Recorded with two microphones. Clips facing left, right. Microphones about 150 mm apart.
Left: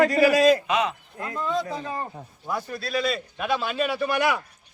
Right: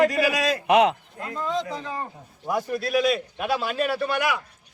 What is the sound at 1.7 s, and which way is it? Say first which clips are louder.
Speech: left 1 dB; 25° left (ahead or behind).